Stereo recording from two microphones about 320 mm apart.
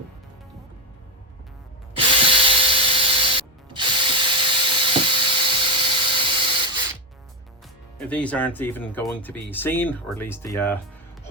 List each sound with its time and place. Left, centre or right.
2.0 s tools: centre
6.1 s printer: centre
7.9 s speech: centre